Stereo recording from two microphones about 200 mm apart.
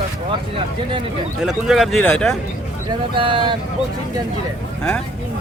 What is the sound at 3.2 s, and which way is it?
Speech, 25° right (ahead or behind).